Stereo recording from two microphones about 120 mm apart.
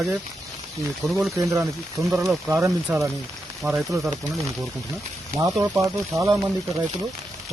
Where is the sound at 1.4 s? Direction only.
25° right (ahead or behind).